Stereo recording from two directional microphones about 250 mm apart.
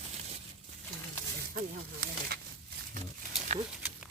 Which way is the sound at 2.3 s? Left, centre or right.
Right.